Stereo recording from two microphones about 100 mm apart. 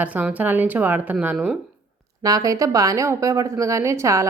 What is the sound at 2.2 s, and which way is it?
A woman's voice, 35° right (ahead or behind).